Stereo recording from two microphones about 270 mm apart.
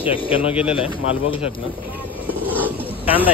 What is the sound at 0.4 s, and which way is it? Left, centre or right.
Speech, centre.